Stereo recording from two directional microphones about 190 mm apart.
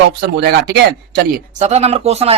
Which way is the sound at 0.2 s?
55° right (ahead or behind).